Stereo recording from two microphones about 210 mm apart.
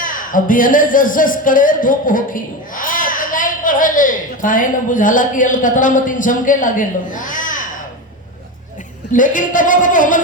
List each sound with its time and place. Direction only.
0.0 s speech: 40° left (ahead or behind)
9.1 s speech: 40° left (ahead or behind)